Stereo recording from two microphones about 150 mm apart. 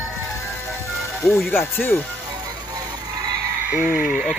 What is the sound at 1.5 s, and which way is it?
Speech, 15° left (ahead or behind).